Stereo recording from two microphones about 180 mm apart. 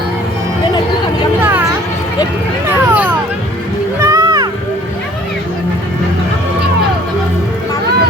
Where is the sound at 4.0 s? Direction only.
20° right (ahead or behind).